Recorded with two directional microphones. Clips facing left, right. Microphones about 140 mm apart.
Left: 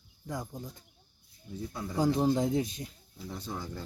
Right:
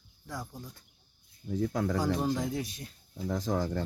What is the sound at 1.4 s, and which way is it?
Speech, 75° right (ahead or behind).